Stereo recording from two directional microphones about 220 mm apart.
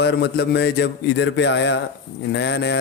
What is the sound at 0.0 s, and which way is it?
Mantra, 50° left (ahead or behind).